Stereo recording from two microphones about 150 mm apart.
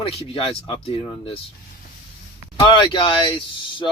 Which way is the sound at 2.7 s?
30° left (ahead or behind).